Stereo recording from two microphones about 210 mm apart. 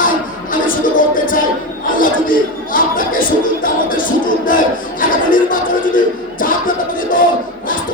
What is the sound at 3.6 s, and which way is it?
Music, 40° left (ahead or behind).